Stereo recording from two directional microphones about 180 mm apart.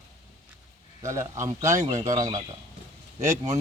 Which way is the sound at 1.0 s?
15° right (ahead or behind).